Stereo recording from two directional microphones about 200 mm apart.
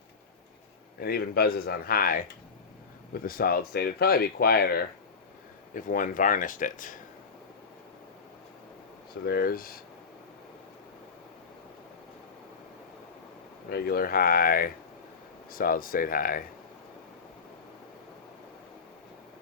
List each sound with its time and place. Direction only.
0.9 s speech: 50° left (ahead or behind)
3.2 s speech: 45° left (ahead or behind)
9.2 s speech: 50° left (ahead or behind)
13.7 s speech: 50° left (ahead or behind)